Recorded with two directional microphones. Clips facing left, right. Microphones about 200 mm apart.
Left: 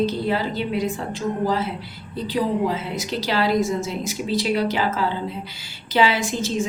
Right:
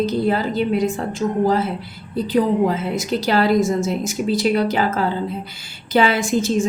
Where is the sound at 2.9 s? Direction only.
50° right (ahead or behind).